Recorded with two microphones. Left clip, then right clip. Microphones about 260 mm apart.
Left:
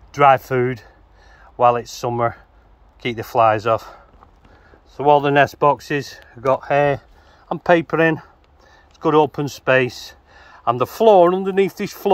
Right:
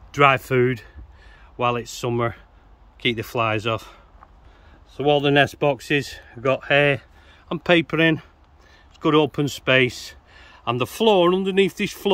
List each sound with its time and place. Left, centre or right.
0.1 s speech: right
6.7 s speech: centre
7.5 s speech: centre